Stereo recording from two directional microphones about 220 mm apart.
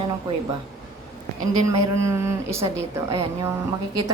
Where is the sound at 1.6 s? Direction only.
15° right (ahead or behind).